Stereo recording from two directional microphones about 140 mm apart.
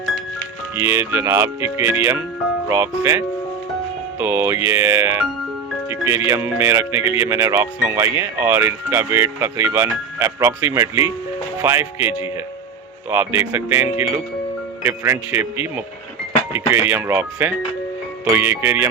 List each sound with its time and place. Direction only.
0.8 s speech: 15° right (ahead or behind)
12.0 s speech: 35° left (ahead or behind)
13.1 s speech: 15° right (ahead or behind)
14.8 s speech: 15° right (ahead or behind)